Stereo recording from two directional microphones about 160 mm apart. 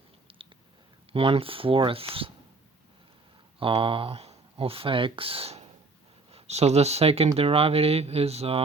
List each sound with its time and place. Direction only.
0.3 s a sound: 35° right (ahead or behind)
1.1 s speech: 35° right (ahead or behind)
3.6 s speech: 35° right (ahead or behind)